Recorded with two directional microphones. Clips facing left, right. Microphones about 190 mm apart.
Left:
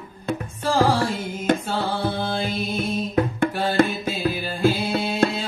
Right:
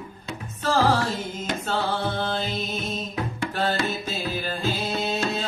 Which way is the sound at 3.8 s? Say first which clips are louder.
Left 9 dB; 55° left (ahead or behind).